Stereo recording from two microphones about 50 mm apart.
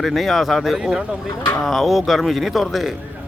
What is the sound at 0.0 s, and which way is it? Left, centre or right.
A man's voice, centre.